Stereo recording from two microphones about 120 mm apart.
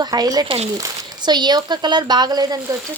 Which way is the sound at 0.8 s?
35° right (ahead or behind).